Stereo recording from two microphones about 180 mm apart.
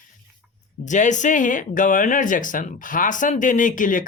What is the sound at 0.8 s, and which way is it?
Speech, 45° left (ahead or behind).